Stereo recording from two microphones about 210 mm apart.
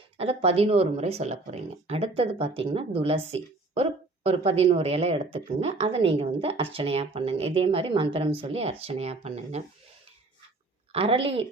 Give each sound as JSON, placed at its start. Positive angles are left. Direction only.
{"t": 0.2, "sound": "a woman's voice", "side_deg": -30}
{"t": 10.9, "sound": "a woman's voice", "side_deg": -25}